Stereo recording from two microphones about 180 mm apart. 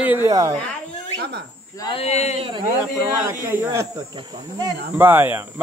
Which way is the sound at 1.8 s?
30° left (ahead or behind).